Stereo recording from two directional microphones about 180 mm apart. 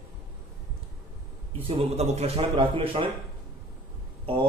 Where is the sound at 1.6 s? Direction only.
35° right (ahead or behind).